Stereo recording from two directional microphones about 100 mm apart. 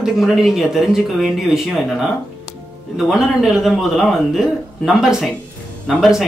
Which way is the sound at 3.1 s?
Centre (ahead or behind).